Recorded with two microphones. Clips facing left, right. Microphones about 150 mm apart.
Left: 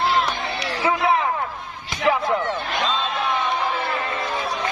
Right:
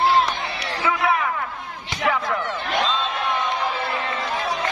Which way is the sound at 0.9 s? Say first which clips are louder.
Left 2 dB; 25° left (ahead or behind).